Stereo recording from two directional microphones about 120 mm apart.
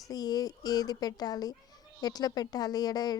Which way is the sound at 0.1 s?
30° left (ahead or behind).